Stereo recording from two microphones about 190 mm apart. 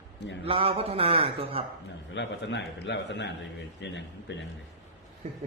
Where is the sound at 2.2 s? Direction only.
65° left (ahead or behind).